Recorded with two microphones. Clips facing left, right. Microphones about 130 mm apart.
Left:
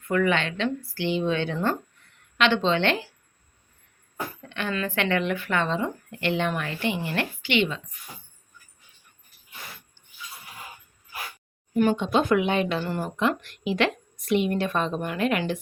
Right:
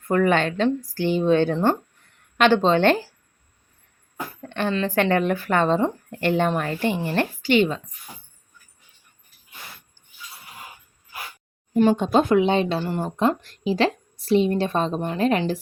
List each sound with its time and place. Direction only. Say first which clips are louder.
0.0 s a woman's voice: right 4 dB; 40° right (ahead or behind)
4.4 s speech: right 8 dB; 45° right (ahead or behind)
4.7 s speech: right 3 dB; 30° right (ahead or behind)
4.9 s speech: right 5 dB; 40° right (ahead or behind)
11.7 s speech: right 4 dB; 35° right (ahead or behind)
12.3 s speech: right 4 dB; 30° right (ahead or behind)